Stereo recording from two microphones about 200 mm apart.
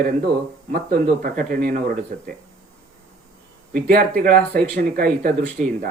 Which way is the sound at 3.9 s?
45° right (ahead or behind).